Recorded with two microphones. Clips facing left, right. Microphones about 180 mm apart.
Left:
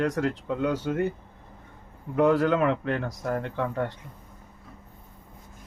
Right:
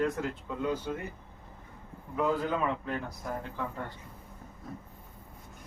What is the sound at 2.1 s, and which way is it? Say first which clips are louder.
Speech: left 8 dB; 70° left (ahead or behind).